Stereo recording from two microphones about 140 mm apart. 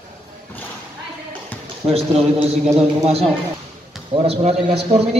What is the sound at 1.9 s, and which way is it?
Speech, 45° right (ahead or behind).